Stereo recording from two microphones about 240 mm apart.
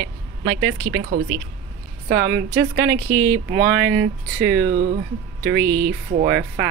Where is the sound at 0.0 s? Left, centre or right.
Right.